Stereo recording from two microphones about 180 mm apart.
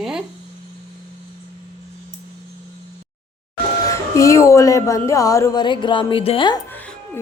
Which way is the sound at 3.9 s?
15° left (ahead or behind).